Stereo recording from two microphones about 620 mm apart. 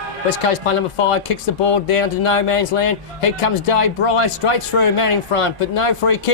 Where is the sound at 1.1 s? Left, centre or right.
Left.